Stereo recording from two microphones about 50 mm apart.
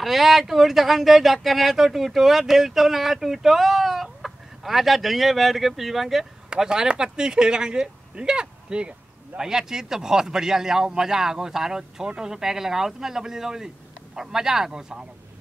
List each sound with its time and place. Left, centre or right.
0.0 s speech: centre